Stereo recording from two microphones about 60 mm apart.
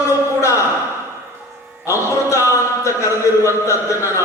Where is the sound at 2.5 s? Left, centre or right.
Left.